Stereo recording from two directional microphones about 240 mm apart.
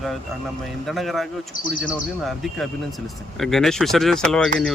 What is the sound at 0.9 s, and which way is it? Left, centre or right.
Speech, centre.